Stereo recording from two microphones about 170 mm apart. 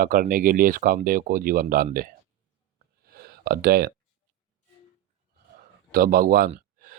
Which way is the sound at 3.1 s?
65° right (ahead or behind).